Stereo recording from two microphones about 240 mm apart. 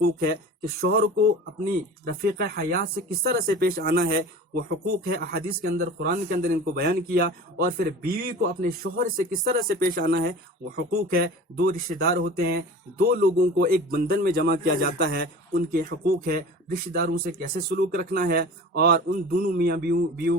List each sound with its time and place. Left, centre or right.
0.0 s speech: right